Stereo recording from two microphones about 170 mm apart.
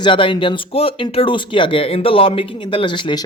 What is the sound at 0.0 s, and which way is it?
Speech, 30° left (ahead or behind).